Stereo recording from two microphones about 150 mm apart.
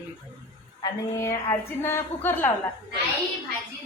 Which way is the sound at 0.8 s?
25° left (ahead or behind).